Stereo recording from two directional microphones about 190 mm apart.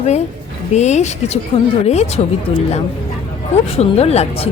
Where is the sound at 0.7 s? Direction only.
35° left (ahead or behind).